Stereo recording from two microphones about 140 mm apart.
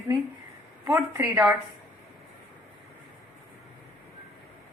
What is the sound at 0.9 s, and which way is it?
Speech, 15° right (ahead or behind).